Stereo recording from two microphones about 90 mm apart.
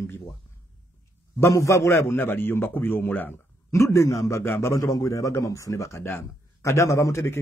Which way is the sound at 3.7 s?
30° left (ahead or behind).